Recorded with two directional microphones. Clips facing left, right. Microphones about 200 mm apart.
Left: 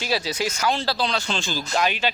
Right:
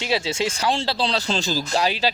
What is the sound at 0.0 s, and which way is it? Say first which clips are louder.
Speech: right 2 dB; 25° right (ahead or behind).